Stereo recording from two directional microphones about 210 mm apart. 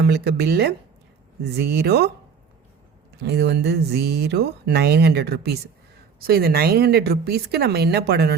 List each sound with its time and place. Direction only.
0.0 s speech: 50° right (ahead or behind)
3.2 s speech: 50° right (ahead or behind)